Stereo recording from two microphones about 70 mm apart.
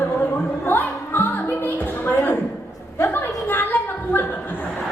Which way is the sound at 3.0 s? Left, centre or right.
Left.